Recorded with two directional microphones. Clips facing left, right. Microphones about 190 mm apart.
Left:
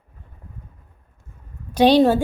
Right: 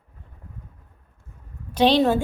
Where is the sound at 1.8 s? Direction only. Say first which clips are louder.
Left 4 dB; 35° left (ahead or behind).